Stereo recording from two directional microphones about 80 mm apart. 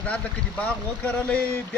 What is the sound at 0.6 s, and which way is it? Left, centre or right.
Speech, centre.